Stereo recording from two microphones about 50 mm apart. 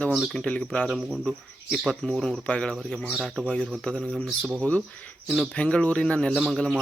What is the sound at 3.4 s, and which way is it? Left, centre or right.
Speech, left.